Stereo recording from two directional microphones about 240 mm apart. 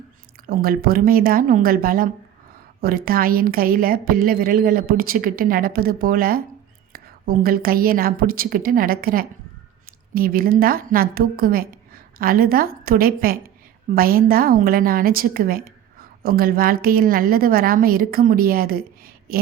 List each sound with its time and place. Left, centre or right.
0.4 s a woman's voice: right